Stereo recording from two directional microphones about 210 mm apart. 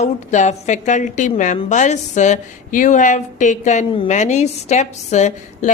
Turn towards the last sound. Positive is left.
turn(degrees=35)  # may be behind; listen again after turning